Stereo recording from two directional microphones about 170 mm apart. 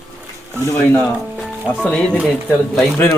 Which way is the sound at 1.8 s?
5° left (ahead or behind).